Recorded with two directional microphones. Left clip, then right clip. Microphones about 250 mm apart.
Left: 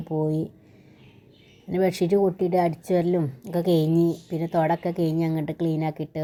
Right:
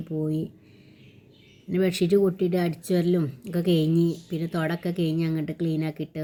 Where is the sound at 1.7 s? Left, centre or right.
Centre.